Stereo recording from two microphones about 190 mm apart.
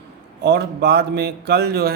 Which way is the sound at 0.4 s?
60° right (ahead or behind).